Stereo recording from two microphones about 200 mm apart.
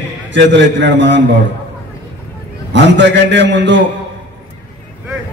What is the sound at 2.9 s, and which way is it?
Speech, 65° right (ahead or behind).